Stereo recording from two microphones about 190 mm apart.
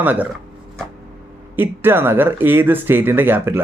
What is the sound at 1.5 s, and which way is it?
Speech, 10° right (ahead or behind).